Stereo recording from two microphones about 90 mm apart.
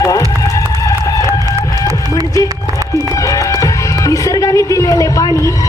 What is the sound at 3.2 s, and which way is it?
Music, 35° left (ahead or behind).